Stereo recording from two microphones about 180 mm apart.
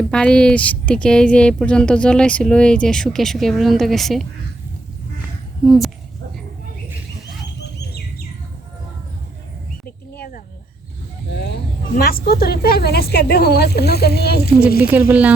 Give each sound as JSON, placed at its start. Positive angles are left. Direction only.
{"t": 0.1, "sound": "speech", "side_deg": 5}
{"t": 5.6, "sound": "speech", "side_deg": 0}
{"t": 10.2, "sound": "a sound", "side_deg": 50}
{"t": 11.3, "sound": "vehicle", "side_deg": 70}
{"t": 11.9, "sound": "a woman's voice", "side_deg": 60}
{"t": 14.8, "sound": "speech", "side_deg": -10}